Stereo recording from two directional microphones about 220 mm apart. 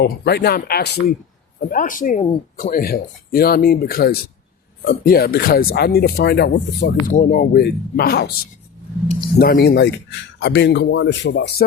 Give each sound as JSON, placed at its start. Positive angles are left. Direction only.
{"t": 0.0, "sound": "a man's voice", "side_deg": 45}
{"t": 7.0, "sound": "a man's voice", "side_deg": 35}
{"t": 9.4, "sound": "a man's voice", "side_deg": 45}